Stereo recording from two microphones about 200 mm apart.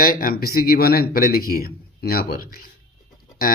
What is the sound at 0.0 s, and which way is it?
Speech, 45° left (ahead or behind).